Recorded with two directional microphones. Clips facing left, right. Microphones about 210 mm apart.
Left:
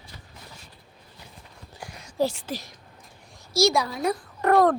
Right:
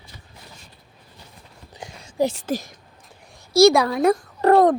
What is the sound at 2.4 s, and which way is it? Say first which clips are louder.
Speech: right 8 dB; 45° right (ahead or behind).